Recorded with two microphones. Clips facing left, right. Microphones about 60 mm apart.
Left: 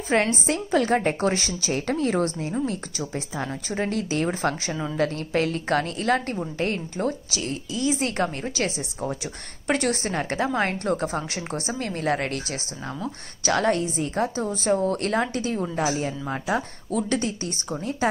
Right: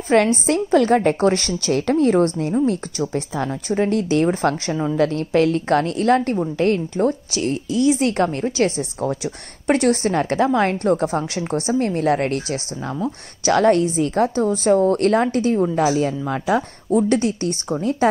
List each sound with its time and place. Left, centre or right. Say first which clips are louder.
0.1 s a woman's voice: right 6 dB; right
3.8 s a woman's voice: right 7 dB; right
13.9 s speech: right 7 dB; right
14.2 s a woman's voice: right 7 dB; right
15.8 s speech: right 7 dB; right
16.9 s a woman's voice: right 8 dB; right